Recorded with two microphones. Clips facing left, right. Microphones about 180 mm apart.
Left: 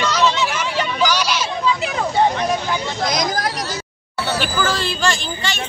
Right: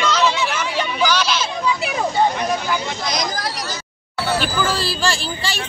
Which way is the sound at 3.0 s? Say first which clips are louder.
Left 6 dB; 50° left (ahead or behind).